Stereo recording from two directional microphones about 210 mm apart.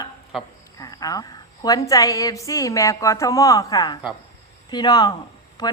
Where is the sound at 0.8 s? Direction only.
15° left (ahead or behind).